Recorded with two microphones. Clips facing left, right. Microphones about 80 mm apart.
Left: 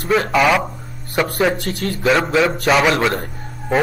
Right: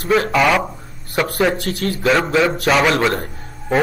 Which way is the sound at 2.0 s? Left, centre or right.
Centre.